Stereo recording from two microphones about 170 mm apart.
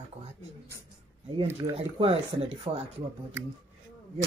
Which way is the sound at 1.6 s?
35° right (ahead or behind).